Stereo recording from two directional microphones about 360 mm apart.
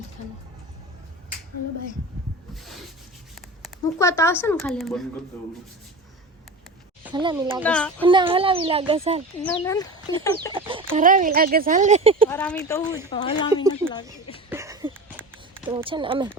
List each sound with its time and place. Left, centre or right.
3.6 s speech: centre
7.0 s speech: centre
7.6 s speech: centre
8.0 s a child's voice: centre
9.4 s speech: centre
10.5 s speech: centre
12.3 s speech: centre
14.5 s a sound: centre
15.6 s a child's voice: centre